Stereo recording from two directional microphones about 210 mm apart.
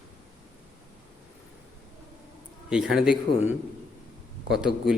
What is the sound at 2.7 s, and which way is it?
Speech, 5° right (ahead or behind).